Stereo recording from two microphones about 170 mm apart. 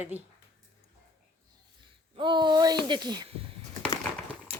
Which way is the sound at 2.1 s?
30° right (ahead or behind).